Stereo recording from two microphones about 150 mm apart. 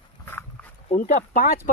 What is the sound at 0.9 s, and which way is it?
Speech, 65° left (ahead or behind).